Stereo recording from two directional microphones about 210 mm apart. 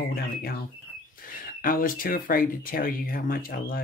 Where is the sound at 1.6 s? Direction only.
40° left (ahead or behind).